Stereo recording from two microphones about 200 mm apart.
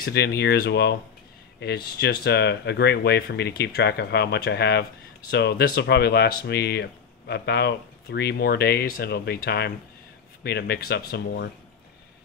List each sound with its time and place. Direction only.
0.0 s speech: 50° left (ahead or behind)